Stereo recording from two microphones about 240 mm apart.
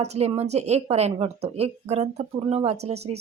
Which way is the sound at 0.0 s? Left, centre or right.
Right.